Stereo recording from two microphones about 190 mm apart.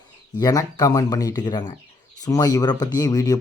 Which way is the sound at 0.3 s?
20° left (ahead or behind).